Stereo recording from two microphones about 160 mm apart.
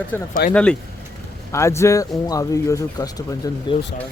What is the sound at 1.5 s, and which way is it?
Speech, 15° left (ahead or behind).